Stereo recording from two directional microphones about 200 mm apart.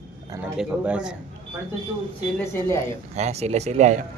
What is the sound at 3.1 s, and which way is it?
Speech, 35° right (ahead or behind).